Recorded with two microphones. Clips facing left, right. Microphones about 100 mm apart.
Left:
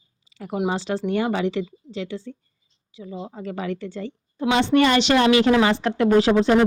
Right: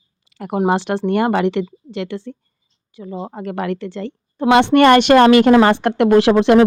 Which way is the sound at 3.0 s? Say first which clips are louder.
Right 5 dB; 55° right (ahead or behind).